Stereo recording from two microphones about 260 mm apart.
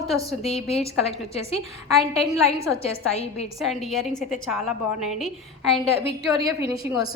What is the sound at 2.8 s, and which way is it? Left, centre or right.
Speech, left.